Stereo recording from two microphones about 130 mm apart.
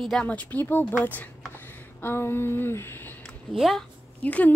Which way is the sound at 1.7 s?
15° left (ahead or behind).